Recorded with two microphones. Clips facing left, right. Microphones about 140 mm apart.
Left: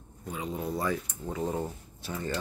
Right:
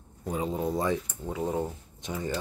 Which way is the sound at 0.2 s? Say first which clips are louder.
Right 5 dB; 35° right (ahead or behind).